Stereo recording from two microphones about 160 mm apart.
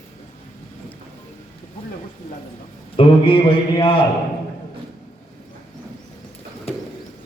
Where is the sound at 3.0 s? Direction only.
35° left (ahead or behind).